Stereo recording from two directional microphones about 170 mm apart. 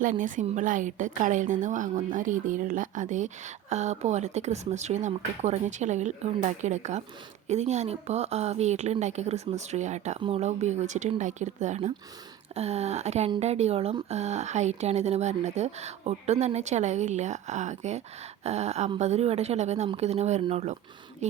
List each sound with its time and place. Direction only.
0.0 s a woman's voice: 50° right (ahead or behind)